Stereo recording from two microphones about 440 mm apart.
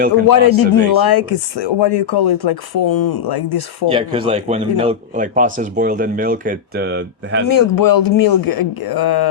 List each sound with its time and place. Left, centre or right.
0.5 s speech: left
3.8 s speech: centre
7.4 s speech: left